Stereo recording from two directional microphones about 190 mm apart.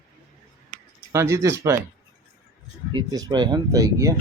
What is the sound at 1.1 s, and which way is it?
Speech, 15° right (ahead or behind).